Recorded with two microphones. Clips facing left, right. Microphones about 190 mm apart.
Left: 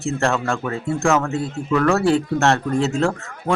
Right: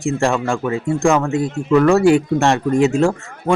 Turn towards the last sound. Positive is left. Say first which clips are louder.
# right 4 dB
turn(degrees=-15)  # may be behind; listen again after turning